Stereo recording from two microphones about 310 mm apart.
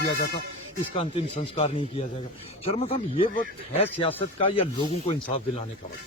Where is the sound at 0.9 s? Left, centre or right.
Centre.